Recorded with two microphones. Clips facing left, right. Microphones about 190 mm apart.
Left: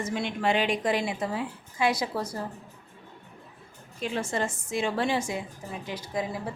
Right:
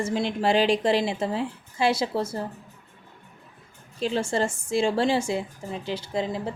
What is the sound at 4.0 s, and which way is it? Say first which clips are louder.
A woman's voice: right 4 dB; 30° right (ahead or behind).